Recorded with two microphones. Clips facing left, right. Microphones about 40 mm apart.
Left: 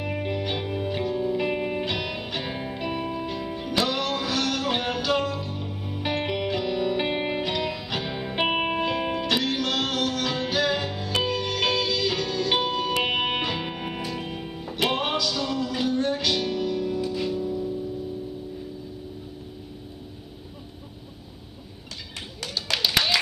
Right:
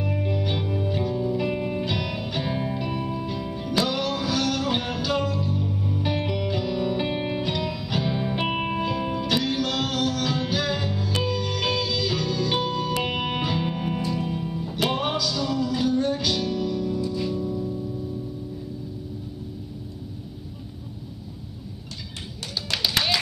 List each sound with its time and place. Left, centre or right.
0.0 s music: left
7.0 s music: left